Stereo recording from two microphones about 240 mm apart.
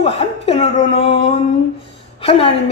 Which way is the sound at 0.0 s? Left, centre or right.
Left.